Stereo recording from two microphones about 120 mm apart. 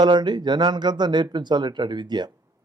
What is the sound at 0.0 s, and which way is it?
A man's voice, 40° right (ahead or behind).